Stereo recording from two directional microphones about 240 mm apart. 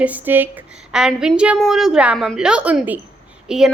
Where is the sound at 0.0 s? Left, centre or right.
Centre.